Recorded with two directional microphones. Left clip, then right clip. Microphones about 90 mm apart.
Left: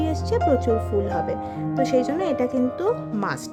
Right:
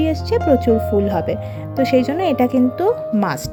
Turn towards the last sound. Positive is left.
turn(degrees=-30)  # may be behind; listen again after turning